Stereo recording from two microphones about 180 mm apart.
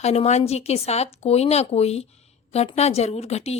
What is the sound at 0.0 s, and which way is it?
A woman's voice, 35° left (ahead or behind).